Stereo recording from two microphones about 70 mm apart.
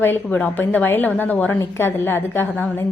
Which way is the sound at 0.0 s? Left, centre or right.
Left.